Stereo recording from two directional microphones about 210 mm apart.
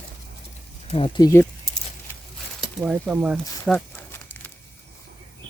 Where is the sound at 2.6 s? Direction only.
5° right (ahead or behind).